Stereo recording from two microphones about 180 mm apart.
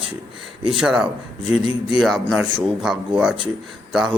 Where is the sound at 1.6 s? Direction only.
25° right (ahead or behind).